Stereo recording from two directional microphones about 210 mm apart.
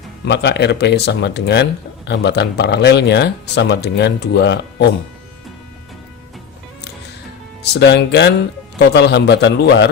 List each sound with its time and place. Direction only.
0.3 s speech: 55° left (ahead or behind)
7.6 s a man's voice: 55° left (ahead or behind)